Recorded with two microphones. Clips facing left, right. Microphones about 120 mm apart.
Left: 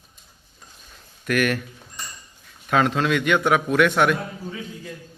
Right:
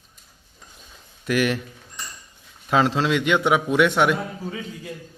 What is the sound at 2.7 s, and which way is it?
A man's voice, 25° right (ahead or behind).